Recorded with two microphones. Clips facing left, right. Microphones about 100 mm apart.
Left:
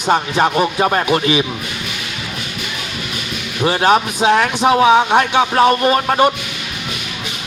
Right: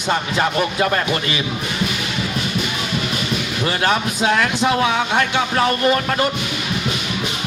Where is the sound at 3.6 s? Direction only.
20° left (ahead or behind).